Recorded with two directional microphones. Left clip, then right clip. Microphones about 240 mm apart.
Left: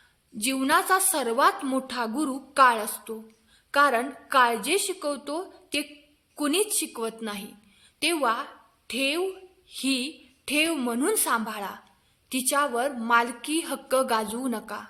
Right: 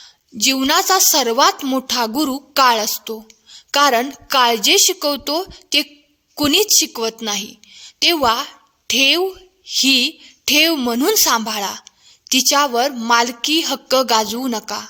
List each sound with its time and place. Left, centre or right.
0.0 s a woman's voice: right